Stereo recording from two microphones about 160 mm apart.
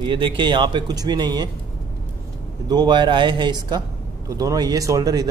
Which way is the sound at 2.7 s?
25° right (ahead or behind).